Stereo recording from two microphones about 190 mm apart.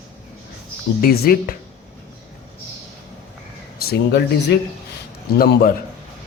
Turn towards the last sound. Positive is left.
turn(degrees=50)  # may be behind; listen again after turning